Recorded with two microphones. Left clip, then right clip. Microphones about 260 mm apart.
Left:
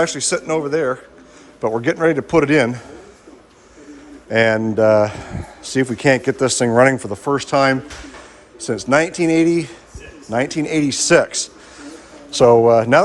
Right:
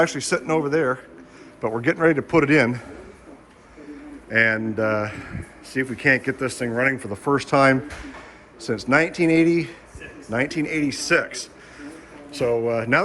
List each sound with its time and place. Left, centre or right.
0.0 s a man's voice: centre
4.3 s speech: centre
7.1 s a man's voice: centre